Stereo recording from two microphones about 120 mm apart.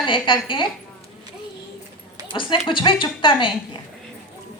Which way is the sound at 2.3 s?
45° left (ahead or behind).